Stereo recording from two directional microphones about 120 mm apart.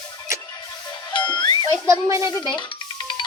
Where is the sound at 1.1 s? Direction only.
35° left (ahead or behind).